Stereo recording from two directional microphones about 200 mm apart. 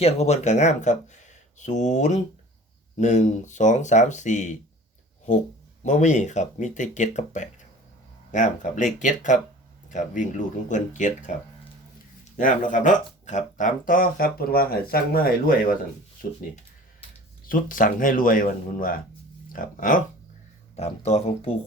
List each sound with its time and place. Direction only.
0.0 s speech: 35° left (ahead or behind)
5.8 s speech: 35° left (ahead or behind)
12.4 s speech: 40° left (ahead or behind)
17.5 s speech: 45° left (ahead or behind)
20.7 s speech: 30° left (ahead or behind)